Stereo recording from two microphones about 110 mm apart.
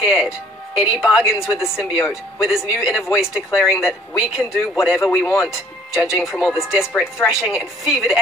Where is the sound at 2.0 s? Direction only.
25° left (ahead or behind).